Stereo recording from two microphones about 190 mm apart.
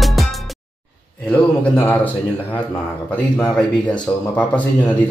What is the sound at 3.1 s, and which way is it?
Speech, 5° left (ahead or behind).